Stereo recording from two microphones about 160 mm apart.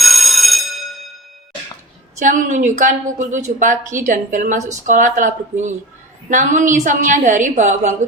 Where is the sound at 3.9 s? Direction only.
55° right (ahead or behind).